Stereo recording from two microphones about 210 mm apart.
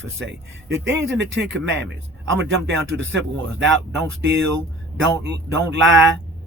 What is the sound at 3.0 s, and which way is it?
Speech, 60° right (ahead or behind).